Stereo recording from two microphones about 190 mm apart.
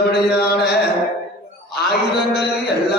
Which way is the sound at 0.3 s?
55° left (ahead or behind).